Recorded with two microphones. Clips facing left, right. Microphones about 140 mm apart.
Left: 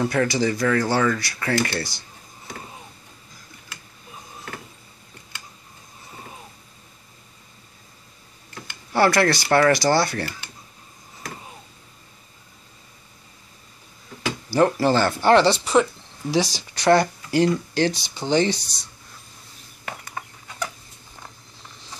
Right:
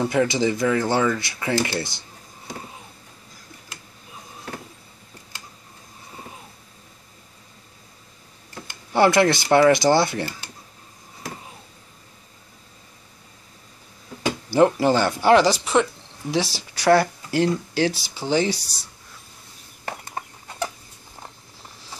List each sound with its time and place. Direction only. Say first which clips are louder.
0.0 s speech: right 1 dB; 15° right (ahead or behind)
8.9 s speech: right 2 dB; 20° right (ahead or behind)
14.5 s speech: right 1 dB; 15° right (ahead or behind)
19.8 s chicken: right 2 dB; 35° right (ahead or behind)